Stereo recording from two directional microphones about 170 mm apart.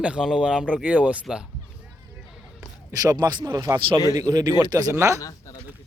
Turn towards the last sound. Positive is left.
turn(degrees=20)  # may be behind; listen again after turning